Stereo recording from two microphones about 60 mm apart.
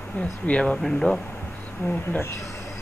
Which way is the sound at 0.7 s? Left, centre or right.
Centre.